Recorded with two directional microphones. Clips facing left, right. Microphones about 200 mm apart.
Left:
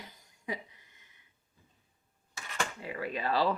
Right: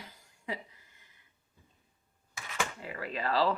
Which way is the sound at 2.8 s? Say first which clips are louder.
Left 1 dB; 15° left (ahead or behind).